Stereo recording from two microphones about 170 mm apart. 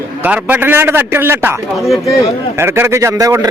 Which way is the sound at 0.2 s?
10° right (ahead or behind).